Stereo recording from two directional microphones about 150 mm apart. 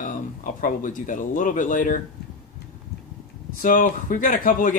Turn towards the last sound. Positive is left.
turn(degrees=65)  # may be behind; listen again after turning